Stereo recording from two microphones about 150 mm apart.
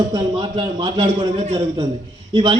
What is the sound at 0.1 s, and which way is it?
A man's voice, 30° right (ahead or behind).